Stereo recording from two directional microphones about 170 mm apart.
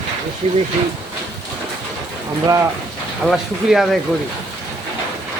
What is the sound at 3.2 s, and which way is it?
Speech, centre (ahead or behind).